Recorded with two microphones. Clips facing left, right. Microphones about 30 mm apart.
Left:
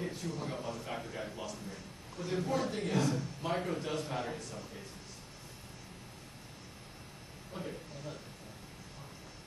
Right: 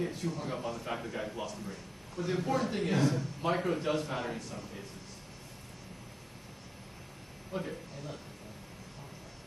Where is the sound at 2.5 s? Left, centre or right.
Right.